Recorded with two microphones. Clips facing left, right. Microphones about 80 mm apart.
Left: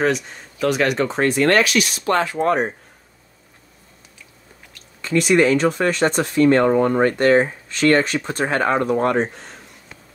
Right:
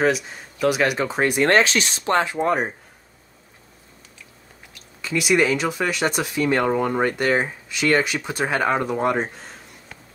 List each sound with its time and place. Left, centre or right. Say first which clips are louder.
0.0 s speech: even; centre
1.3 s speech: even; right
2.3 s speech: left 2 dB; centre
5.0 s speech: left 4 dB; centre